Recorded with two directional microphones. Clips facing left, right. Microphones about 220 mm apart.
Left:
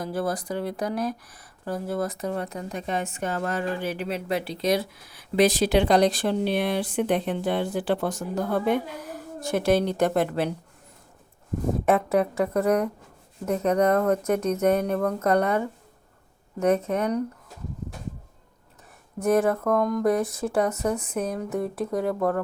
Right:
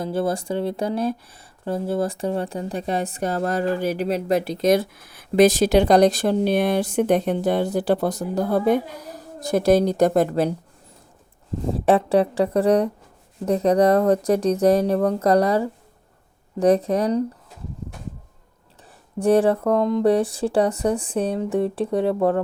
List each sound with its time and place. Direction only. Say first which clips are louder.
0.0 s speech: right 4 dB; 25° right (ahead or behind)
11.9 s speech: right 5 dB; 30° right (ahead or behind)
19.2 s speech: right 4 dB; 30° right (ahead or behind)